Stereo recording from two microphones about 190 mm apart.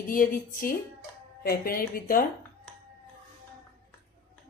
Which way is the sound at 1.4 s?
50° left (ahead or behind).